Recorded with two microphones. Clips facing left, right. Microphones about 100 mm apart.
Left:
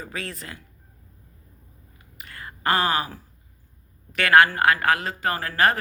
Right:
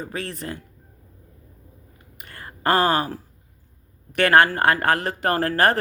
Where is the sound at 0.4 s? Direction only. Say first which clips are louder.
Right 8 dB; 35° right (ahead or behind).